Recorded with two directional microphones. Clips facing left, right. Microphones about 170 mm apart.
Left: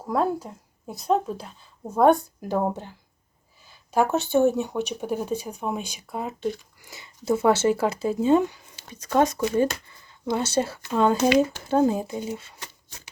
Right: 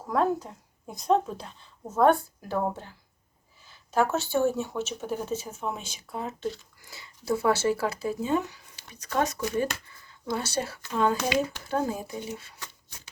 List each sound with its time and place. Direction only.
0.0 s speech: 10° left (ahead or behind)
2.0 s speech: 15° left (ahead or behind)